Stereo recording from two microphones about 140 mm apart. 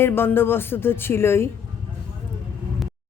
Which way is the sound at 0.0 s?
15° left (ahead or behind).